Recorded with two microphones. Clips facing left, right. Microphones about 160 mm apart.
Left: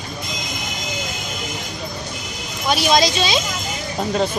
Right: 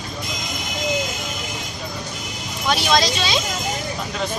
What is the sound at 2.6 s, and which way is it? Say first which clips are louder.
Speech: left 2 dB; 15° left (ahead or behind).